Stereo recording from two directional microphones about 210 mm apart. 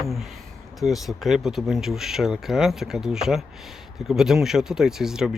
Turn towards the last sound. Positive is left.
turn(degrees=0)  # may be behind; listen again after turning